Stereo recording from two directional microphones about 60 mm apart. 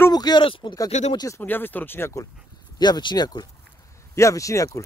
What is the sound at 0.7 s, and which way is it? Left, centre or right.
Speech, left.